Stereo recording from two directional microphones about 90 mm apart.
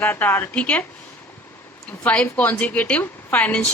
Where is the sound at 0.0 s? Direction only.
20° left (ahead or behind).